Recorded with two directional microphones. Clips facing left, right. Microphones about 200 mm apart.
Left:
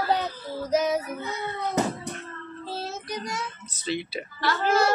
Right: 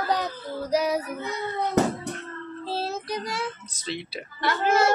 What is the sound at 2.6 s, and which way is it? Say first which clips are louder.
Child singing: right 4 dB; 30° right (ahead or behind).